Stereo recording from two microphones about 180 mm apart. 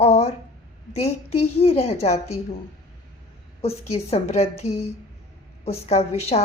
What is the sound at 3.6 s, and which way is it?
A woman's voice, 35° left (ahead or behind).